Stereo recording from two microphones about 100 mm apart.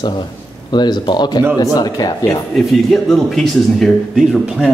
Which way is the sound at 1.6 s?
35° left (ahead or behind).